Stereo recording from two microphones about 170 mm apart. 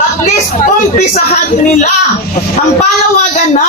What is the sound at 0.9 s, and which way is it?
Speech, 45° left (ahead or behind).